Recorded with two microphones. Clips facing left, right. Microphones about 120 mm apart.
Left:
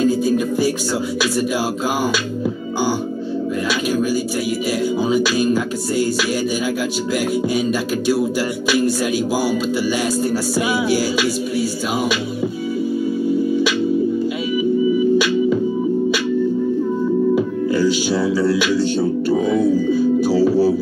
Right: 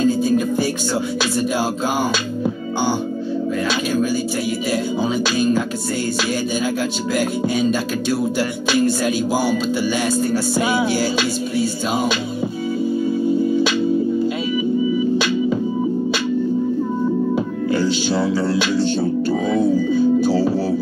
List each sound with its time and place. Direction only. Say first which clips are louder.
0.0 s music: even; 5° left (ahead or behind)
3.9 s a sound: left 1 dB; 5° left (ahead or behind)
5.0 s music: left 2 dB; 5° left (ahead or behind)
7.2 s music: left 1 dB; 5° left (ahead or behind)
8.8 s music: even; 5° left (ahead or behind)
11.5 s music: even; 5° left (ahead or behind)
18.1 s music: left 1 dB; 50° right (ahead or behind)
18.9 s music: left 1 dB; 5° left (ahead or behind)